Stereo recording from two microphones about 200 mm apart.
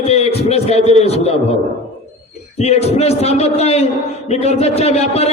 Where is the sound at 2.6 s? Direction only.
30° left (ahead or behind).